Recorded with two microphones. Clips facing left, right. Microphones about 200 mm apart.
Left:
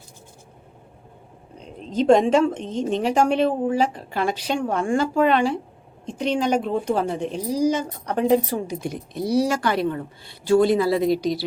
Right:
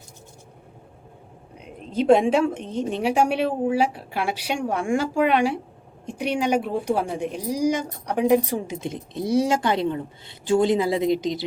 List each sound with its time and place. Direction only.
1.5 s a woman's voice: 10° right (ahead or behind)